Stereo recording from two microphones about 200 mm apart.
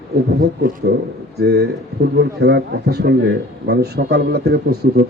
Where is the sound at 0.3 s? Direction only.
50° right (ahead or behind).